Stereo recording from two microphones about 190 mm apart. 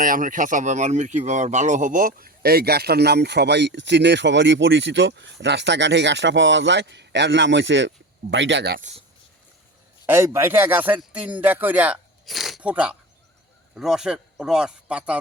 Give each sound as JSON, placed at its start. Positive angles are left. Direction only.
{"t": 0.0, "sound": "speech", "side_deg": -45}
{"t": 8.8, "sound": "speech", "side_deg": -35}
{"t": 10.1, "sound": "speech", "side_deg": -15}